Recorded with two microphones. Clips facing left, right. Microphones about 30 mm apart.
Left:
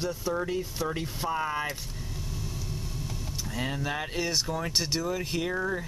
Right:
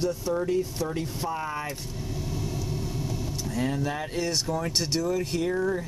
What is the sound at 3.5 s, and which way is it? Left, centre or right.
Speech, centre.